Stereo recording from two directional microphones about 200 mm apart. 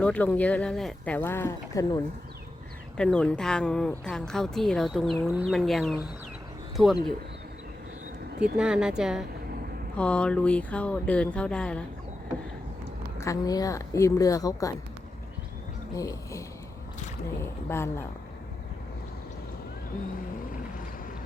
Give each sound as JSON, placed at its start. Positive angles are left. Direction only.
{"t": 0.0, "sound": "speech", "side_deg": 10}
{"t": 3.0, "sound": "a woman's voice", "side_deg": 5}
{"t": 8.5, "sound": "a woman's voice", "side_deg": -5}
{"t": 13.1, "sound": "speech", "side_deg": 15}
{"t": 16.0, "sound": "speech", "side_deg": 15}
{"t": 17.7, "sound": "speech", "side_deg": 10}